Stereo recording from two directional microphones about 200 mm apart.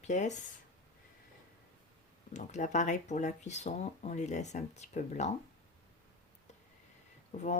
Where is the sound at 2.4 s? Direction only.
35° left (ahead or behind).